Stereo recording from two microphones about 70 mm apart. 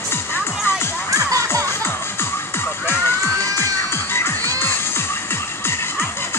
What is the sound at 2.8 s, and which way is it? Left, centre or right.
Music, left.